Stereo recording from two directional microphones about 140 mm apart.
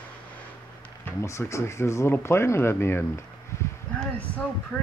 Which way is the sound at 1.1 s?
20° left (ahead or behind).